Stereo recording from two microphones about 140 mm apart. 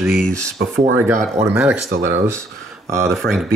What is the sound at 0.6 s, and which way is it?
Speech, 90° right.